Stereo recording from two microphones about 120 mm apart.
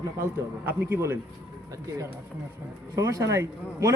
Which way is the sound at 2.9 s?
25° right (ahead or behind).